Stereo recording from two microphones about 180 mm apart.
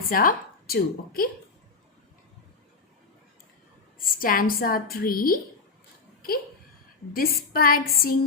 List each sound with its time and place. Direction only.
0.1 s a woman's voice: 50° left (ahead or behind)
3.9 s a woman's voice: 50° left (ahead or behind)
7.1 s a woman's voice: 55° left (ahead or behind)